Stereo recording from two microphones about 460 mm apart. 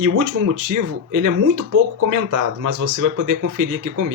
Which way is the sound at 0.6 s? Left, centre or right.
Right.